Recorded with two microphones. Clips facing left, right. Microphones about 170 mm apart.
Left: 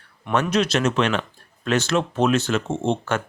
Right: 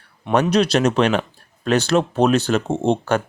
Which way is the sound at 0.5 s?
35° right (ahead or behind).